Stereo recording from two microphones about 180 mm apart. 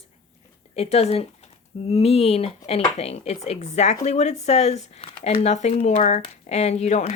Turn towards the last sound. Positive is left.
turn(degrees=40)  # may be behind; listen again after turning